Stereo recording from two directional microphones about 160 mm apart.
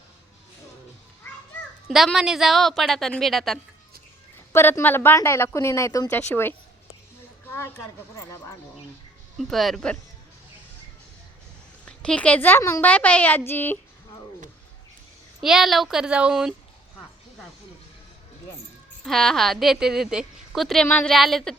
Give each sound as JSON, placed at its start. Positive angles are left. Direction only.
{"t": 1.9, "sound": "a woman's voice", "side_deg": 0}
{"t": 4.5, "sound": "speech", "side_deg": 15}
{"t": 8.1, "sound": "speech", "side_deg": 20}
{"t": 9.4, "sound": "a woman's voice", "side_deg": 0}
{"t": 11.9, "sound": "speech", "side_deg": 5}
{"t": 15.4, "sound": "a woman's voice", "side_deg": 0}
{"t": 19.0, "sound": "a woman's voice", "side_deg": 0}